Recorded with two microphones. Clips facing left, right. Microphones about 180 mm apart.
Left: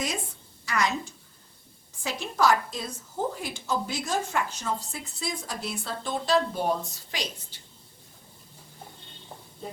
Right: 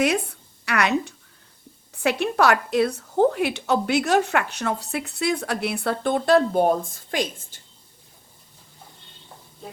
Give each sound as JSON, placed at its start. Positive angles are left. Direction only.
{"t": 0.0, "sound": "a woman's voice", "side_deg": -65}